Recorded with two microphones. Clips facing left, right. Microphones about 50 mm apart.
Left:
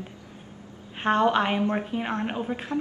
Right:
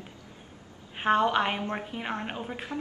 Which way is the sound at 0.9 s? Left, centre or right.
Centre.